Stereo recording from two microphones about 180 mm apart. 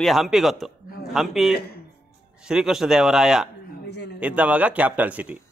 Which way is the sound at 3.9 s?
70° left (ahead or behind).